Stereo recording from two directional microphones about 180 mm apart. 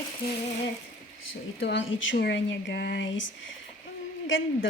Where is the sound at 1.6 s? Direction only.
90° left.